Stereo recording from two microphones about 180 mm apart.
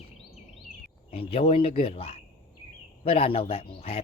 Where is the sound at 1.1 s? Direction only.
30° left (ahead or behind).